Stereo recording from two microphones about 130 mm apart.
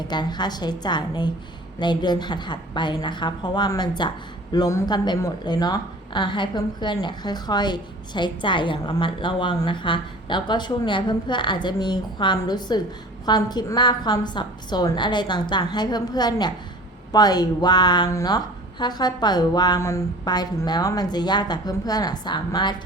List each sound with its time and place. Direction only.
0.1 s a woman's voice: 35° left (ahead or behind)